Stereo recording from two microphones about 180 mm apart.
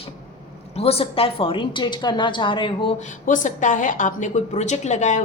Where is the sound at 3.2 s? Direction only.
45° left (ahead or behind).